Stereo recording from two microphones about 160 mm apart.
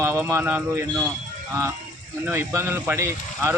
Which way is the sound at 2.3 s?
15° right (ahead or behind).